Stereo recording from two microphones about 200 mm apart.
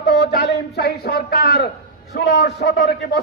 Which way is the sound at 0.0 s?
55° left (ahead or behind).